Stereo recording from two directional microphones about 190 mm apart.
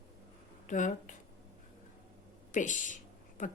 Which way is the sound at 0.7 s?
40° left (ahead or behind).